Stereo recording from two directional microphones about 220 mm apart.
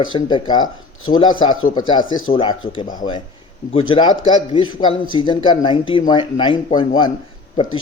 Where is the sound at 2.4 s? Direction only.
25° left (ahead or behind).